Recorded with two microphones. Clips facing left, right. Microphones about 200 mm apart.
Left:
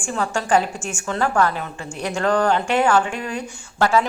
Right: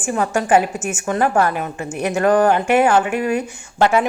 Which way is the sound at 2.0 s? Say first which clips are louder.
Right 5 dB; 20° right (ahead or behind).